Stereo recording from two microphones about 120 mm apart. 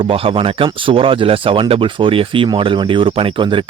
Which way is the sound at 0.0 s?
50° right (ahead or behind).